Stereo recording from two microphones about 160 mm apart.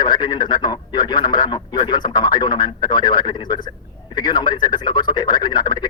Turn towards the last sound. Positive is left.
turn(degrees=25)  # may be behind; listen again after turning